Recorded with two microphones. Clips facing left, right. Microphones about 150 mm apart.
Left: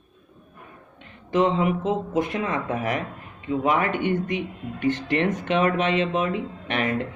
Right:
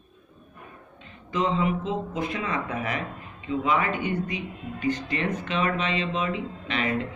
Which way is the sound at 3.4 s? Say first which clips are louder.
Left 2 dB; 60° left (ahead or behind).